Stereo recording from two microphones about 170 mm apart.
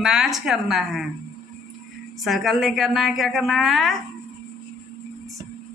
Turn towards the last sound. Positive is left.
turn(degrees=0)  # may be behind; listen again after turning